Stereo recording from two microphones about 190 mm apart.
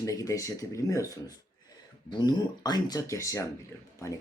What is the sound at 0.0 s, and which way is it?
Speech, 15° left (ahead or behind).